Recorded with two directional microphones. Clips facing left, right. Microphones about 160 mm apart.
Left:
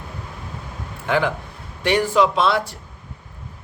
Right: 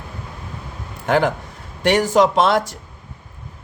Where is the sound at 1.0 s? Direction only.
45° right (ahead or behind).